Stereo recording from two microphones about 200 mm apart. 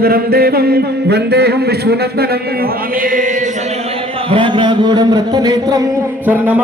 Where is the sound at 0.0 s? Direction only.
50° right (ahead or behind).